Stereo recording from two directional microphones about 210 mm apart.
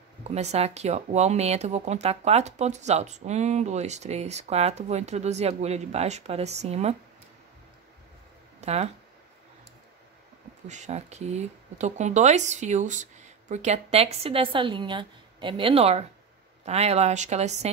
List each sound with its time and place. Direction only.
0.2 s speech: 30° right (ahead or behind)
8.5 s speech: 30° right (ahead or behind)
10.7 s speech: 35° right (ahead or behind)